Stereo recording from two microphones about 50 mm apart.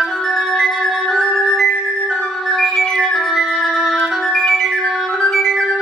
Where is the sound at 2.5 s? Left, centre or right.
Centre.